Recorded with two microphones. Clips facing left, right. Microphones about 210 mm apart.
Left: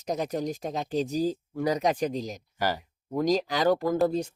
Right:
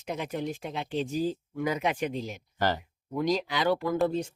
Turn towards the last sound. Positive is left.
turn(degrees=40)  # may be behind; listen again after turning